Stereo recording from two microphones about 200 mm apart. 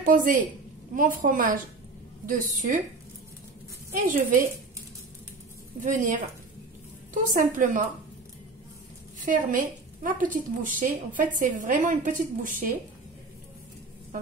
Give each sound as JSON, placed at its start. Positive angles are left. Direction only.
{"t": 0.0, "sound": "a woman's voice", "side_deg": -40}
{"t": 4.0, "sound": "a woman's voice", "side_deg": -45}
{"t": 5.8, "sound": "a woman's voice", "side_deg": -40}
{"t": 7.3, "sound": "a woman's voice", "side_deg": -40}
{"t": 9.2, "sound": "a woman's voice", "side_deg": -40}